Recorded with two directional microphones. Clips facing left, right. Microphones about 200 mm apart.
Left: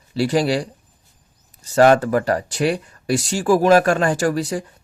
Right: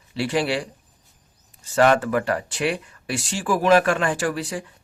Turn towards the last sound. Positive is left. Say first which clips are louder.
# left 5 dB
turn(degrees=40)  # may be behind; listen again after turning